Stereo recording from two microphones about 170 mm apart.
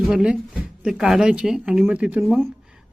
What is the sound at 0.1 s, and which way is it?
A woman's voice, 5° right (ahead or behind).